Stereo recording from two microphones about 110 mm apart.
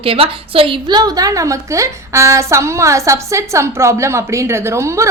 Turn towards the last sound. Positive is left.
turn(degrees=-25)  # may be behind; listen again after turning